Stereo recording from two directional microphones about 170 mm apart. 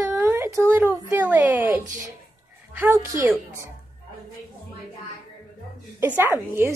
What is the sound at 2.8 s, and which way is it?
Speech, 15° right (ahead or behind).